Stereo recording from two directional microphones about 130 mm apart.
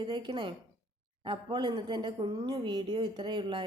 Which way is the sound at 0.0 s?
35° right (ahead or behind).